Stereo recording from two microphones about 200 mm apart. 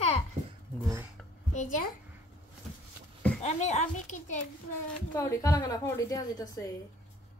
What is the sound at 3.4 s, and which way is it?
Speech, 35° left (ahead or behind).